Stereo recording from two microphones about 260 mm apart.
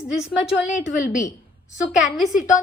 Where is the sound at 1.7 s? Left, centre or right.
Left.